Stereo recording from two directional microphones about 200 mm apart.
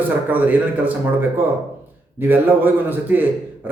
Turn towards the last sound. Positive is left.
turn(degrees=-10)  # may be behind; listen again after turning